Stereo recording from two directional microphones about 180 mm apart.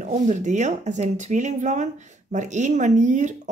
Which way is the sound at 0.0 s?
45° right (ahead or behind).